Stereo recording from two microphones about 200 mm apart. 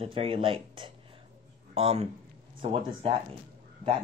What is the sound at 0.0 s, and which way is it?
A man's voice, 30° right (ahead or behind).